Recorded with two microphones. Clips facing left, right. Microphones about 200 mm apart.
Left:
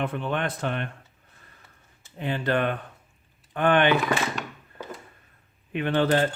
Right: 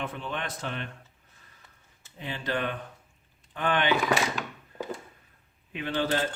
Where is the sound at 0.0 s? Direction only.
55° left (ahead or behind).